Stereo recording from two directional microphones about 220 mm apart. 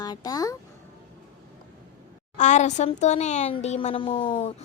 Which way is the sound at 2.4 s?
30° left (ahead or behind).